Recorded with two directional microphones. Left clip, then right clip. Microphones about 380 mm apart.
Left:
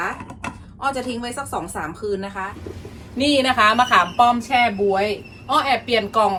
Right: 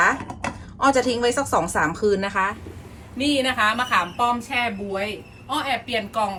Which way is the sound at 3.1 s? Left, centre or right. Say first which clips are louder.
Left 4 dB; centre.